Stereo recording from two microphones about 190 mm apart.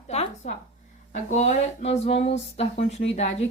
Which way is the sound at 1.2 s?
35° left (ahead or behind).